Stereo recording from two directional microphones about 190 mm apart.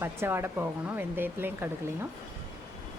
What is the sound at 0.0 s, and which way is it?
A woman's voice, 10° right (ahead or behind).